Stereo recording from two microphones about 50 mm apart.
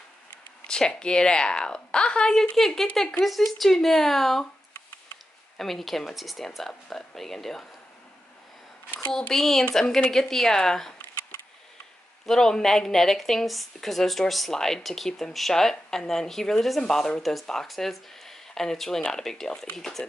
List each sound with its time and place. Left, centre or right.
0.7 s speech: centre
5.6 s speech: centre
9.3 s speech: centre
12.3 s speech: centre
17.2 s speech: centre